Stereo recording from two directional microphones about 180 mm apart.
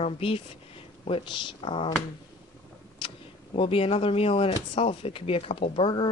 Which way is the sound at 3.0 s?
30° left (ahead or behind).